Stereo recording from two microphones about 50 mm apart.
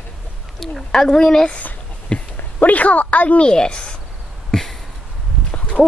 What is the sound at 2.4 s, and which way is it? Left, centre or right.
Speech, left.